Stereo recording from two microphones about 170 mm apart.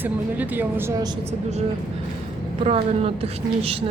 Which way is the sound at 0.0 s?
10° right (ahead or behind).